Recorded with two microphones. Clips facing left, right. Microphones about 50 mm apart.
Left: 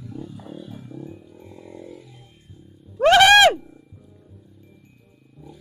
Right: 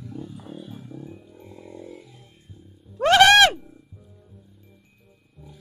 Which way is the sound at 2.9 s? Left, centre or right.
Centre.